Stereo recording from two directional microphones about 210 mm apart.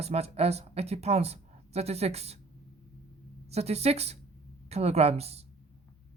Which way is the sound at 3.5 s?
30° right (ahead or behind).